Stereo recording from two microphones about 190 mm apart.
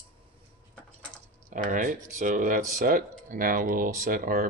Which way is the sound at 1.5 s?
45° right (ahead or behind).